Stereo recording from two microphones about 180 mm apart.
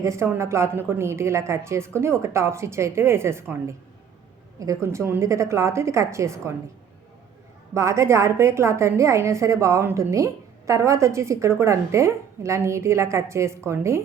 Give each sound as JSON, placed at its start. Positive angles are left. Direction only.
{"t": 0.0, "sound": "a woman's voice", "side_deg": -15}
{"t": 7.7, "sound": "a woman's voice", "side_deg": -15}